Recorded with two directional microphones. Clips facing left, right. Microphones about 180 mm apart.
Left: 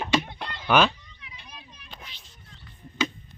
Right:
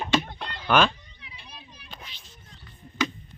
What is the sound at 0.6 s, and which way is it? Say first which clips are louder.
Speech: left 1 dB; 10° left (ahead or behind).